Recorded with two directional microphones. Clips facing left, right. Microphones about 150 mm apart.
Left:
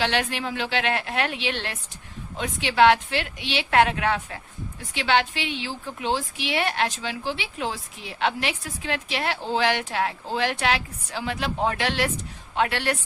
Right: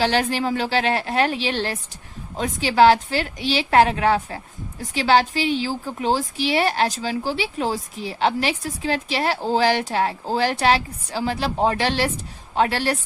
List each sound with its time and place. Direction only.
0.0 s a woman's voice: 35° right (ahead or behind)